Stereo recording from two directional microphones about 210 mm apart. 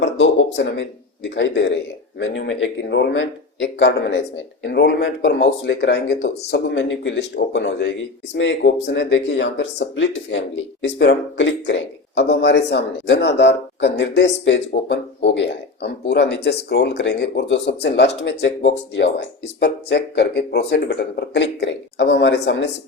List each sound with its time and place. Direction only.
0.0 s speech: 60° left (ahead or behind)
19.5 s speech: 55° left (ahead or behind)